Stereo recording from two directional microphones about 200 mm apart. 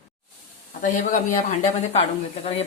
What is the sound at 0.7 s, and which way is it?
Speech, 40° left (ahead or behind).